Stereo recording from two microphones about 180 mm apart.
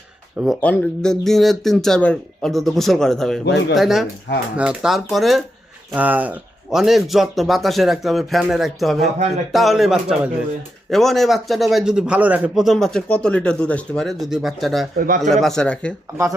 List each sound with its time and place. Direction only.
0.3 s a man's voice: centre (ahead or behind)
3.4 s speech: 75° left (ahead or behind)
3.8 s a man's voice: centre (ahead or behind)
9.1 s speech: 40° right (ahead or behind)
9.5 s a man's voice: centre (ahead or behind)
14.9 s a man's voice: 50° right (ahead or behind)
15.3 s a man's voice: centre (ahead or behind)